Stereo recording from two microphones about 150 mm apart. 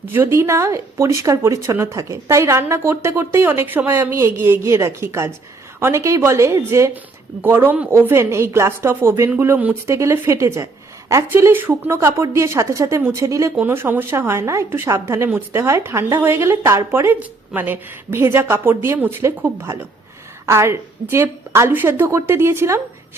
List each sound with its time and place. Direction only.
0.1 s a woman's voice: 15° right (ahead or behind)